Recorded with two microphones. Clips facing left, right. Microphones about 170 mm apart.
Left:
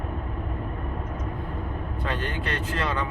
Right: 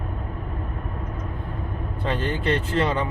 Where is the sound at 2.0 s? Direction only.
25° right (ahead or behind).